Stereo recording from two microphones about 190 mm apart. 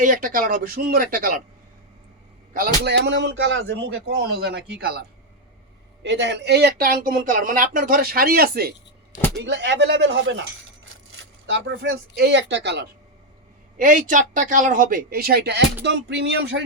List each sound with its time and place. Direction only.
0.0 s speech: 45° right (ahead or behind)
2.5 s a man's voice: 55° right (ahead or behind)
6.0 s speech: 70° right (ahead or behind)
9.3 s speech: 65° right (ahead or behind)
11.5 s a man's voice: 70° right (ahead or behind)
13.7 s speech: 45° right (ahead or behind); by 16.6 s 60° right (ahead or behind)